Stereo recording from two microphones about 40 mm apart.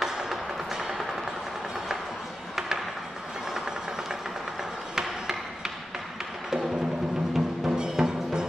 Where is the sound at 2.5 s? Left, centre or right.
Centre.